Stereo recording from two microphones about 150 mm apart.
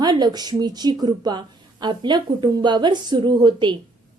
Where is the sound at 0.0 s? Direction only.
25° right (ahead or behind).